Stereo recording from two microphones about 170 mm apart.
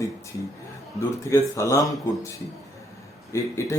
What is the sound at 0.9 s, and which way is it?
A man's voice, 20° left (ahead or behind).